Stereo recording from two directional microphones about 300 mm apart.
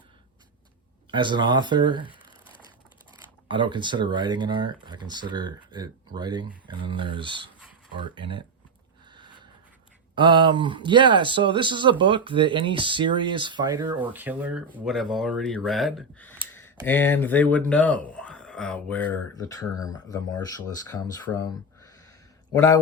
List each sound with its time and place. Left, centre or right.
1.1 s speech: centre
3.5 s speech: centre
9.1 s a sound: centre
10.2 s speech: centre
16.5 s a sound: centre
16.8 s speech: centre